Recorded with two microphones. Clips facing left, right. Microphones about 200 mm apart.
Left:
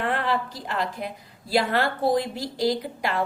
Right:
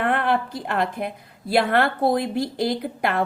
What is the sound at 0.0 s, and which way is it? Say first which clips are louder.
A woman's voice: right 4 dB; 55° right (ahead or behind).